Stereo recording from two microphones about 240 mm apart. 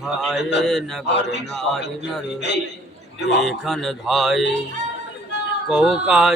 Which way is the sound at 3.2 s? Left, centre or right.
Left.